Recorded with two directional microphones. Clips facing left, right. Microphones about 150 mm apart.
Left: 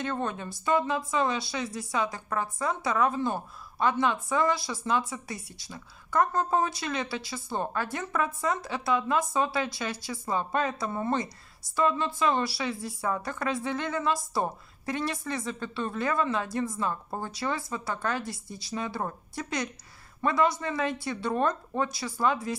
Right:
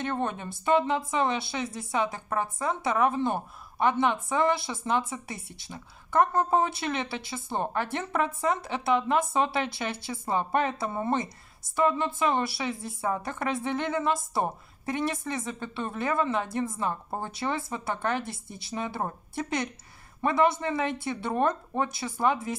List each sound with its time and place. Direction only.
0.0 s speech: 20° right (ahead or behind)